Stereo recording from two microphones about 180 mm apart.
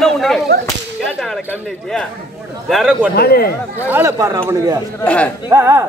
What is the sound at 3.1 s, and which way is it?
Speech, 60° left (ahead or behind).